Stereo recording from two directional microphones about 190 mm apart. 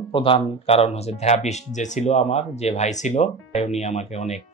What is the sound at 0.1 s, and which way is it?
Speech, 30° left (ahead or behind).